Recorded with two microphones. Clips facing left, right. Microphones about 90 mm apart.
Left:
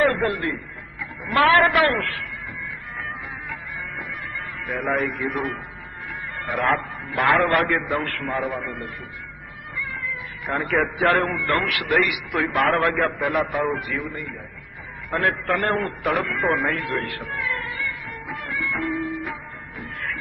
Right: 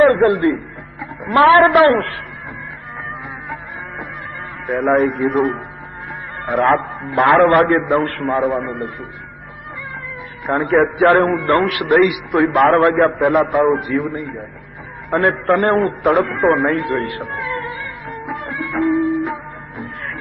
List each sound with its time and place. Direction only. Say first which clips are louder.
0.0 s a man's voice: right 9 dB; 35° right (ahead or behind)
4.6 s a man's voice: right 9 dB; 45° right (ahead or behind)
10.4 s a man's voice: right 8 dB; 35° right (ahead or behind)
18.3 s music: right 3 dB; 30° right (ahead or behind)